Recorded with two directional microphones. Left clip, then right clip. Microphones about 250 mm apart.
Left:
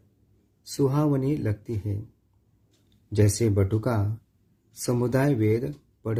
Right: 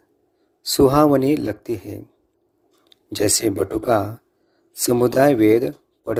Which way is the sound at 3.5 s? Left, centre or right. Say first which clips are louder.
Right 8 dB; right.